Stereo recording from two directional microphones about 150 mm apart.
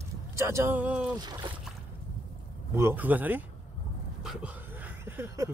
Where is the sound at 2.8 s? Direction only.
15° right (ahead or behind).